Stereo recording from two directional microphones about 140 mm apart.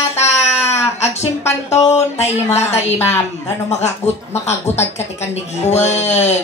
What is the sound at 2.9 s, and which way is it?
Speech, 15° left (ahead or behind).